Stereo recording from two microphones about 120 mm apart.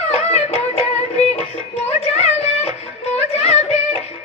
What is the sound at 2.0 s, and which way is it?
Music, 60° left (ahead or behind).